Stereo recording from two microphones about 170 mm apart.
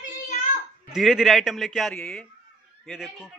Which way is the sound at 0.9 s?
Centre (ahead or behind).